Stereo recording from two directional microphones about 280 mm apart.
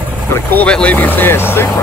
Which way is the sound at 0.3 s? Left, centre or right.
Centre.